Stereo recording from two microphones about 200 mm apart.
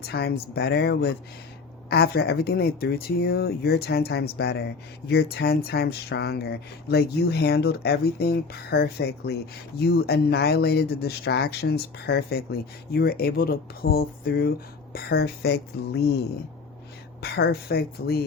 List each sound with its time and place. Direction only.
0.1 s speech: 50° left (ahead or behind)
17.2 s speech: 50° left (ahead or behind)